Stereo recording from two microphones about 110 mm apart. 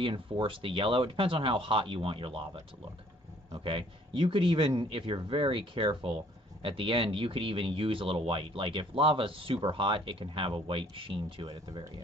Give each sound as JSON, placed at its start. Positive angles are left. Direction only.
{"t": 0.0, "sound": "speech", "side_deg": -50}
{"t": 3.6, "sound": "speech", "side_deg": -50}